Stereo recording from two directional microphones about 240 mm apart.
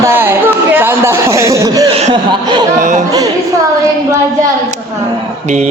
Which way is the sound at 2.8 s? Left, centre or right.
Right.